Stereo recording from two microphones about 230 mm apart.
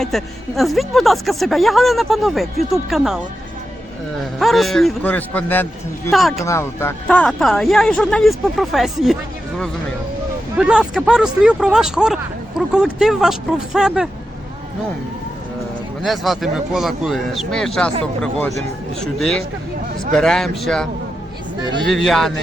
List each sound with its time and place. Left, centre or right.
0.0 s a woman's voice: centre
4.4 s a woman's voice: centre
6.4 s a woman's voice: centre
10.6 s a woman's voice: centre
16.0 s a woman's voice: centre
21.8 s a woman's voice: centre